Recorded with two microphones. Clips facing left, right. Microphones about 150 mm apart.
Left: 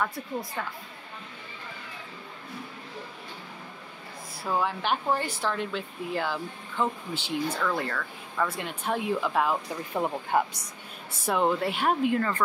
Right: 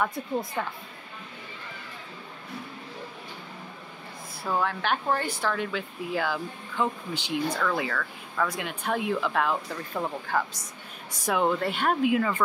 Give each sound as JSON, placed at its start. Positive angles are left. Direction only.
{"t": 0.0, "sound": "a woman's voice", "side_deg": -20}
{"t": 4.5, "sound": "speech", "side_deg": 5}
{"t": 9.7, "sound": "speech", "side_deg": 20}
{"t": 11.2, "sound": "speech", "side_deg": 5}